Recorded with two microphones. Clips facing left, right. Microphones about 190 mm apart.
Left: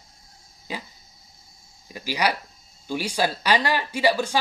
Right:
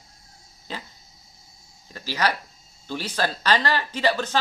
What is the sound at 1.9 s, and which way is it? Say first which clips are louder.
Speech: left 1 dB; 10° left (ahead or behind).